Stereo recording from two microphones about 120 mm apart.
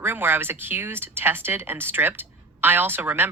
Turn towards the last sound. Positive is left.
turn(degrees=-15)  # may be behind; listen again after turning